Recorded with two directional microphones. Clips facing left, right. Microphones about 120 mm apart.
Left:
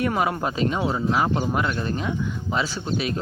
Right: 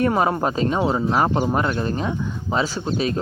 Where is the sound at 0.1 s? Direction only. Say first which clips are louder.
Right 4 dB; 35° right (ahead or behind).